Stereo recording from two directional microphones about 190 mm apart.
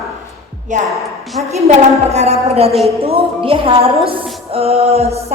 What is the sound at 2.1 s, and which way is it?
Music, 35° right (ahead or behind).